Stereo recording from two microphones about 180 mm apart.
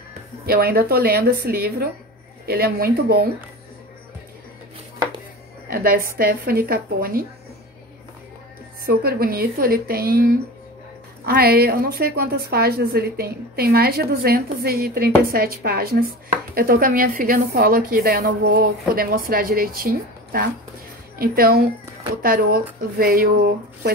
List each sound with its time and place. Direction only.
0.5 s a woman's voice: 60° right (ahead or behind)
5.7 s a woman's voice: 55° right (ahead or behind)
8.8 s a woman's voice: 55° right (ahead or behind)